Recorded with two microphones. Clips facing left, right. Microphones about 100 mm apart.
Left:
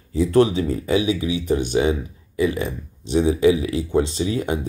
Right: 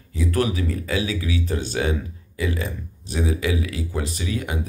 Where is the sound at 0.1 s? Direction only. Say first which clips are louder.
Left 7 dB; 30° left (ahead or behind).